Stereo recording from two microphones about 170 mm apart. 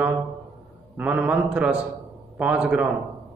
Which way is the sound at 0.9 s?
10° right (ahead or behind).